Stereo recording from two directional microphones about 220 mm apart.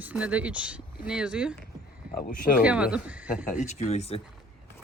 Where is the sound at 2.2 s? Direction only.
40° left (ahead or behind).